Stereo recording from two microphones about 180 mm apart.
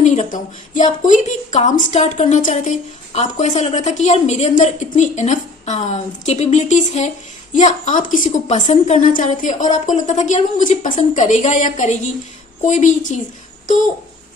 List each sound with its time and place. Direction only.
0.0 s a woman's voice: 45° left (ahead or behind)